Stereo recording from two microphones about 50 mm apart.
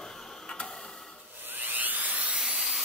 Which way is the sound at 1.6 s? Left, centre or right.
Right.